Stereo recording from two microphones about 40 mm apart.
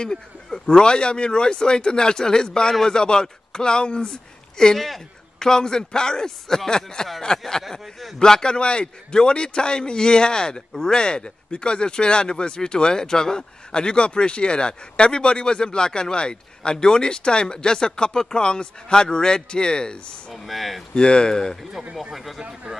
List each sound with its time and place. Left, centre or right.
0.0 s speech: centre
4.7 s speech: centre
5.4 s a man's voice: centre
7.8 s speech: centre
8.2 s speech: centre
20.4 s speech: centre
20.9 s speech: left
22.1 s speech: centre